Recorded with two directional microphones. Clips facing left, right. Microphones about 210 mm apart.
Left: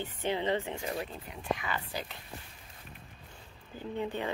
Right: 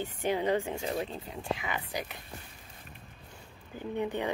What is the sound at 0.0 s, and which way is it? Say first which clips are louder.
Speech: right 2 dB; 15° right (ahead or behind).